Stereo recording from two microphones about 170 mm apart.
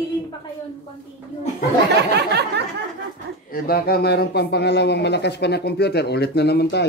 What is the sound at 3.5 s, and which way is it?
A man's voice, 65° left (ahead or behind).